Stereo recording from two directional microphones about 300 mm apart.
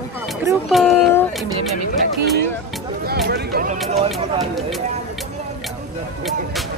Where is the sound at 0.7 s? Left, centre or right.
Centre.